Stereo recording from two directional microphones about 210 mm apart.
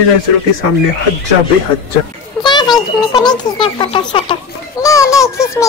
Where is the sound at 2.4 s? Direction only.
20° left (ahead or behind).